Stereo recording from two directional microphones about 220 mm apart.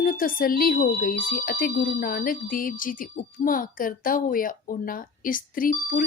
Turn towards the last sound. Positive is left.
turn(degrees=40)  # may be behind; listen again after turning